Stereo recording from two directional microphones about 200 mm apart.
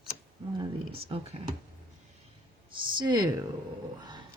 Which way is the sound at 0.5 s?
25° right (ahead or behind).